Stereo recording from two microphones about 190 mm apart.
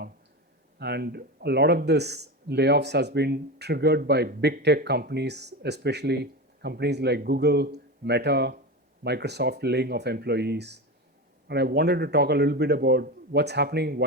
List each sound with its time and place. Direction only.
0.8 s speech: 60° right (ahead or behind)